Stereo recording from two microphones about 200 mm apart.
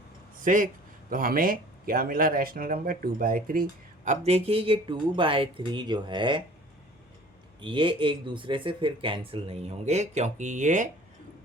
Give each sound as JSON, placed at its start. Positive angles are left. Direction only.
{"t": 0.3, "sound": "speech", "side_deg": -40}
{"t": 7.6, "sound": "speech", "side_deg": -25}